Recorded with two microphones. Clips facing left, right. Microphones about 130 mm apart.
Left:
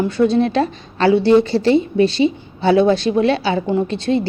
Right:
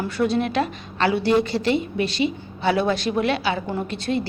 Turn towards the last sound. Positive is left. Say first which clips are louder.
# left 7 dB
turn(degrees=25)  # may be behind; listen again after turning